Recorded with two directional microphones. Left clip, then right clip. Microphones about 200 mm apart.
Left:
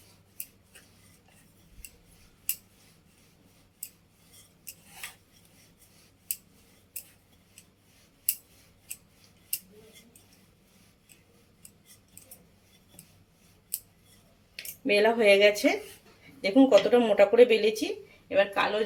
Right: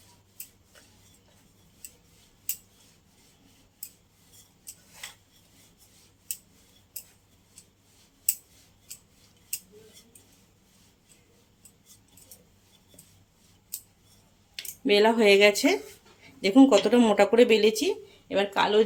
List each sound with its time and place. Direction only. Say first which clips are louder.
14.9 s speech: right 1 dB; 55° right (ahead or behind)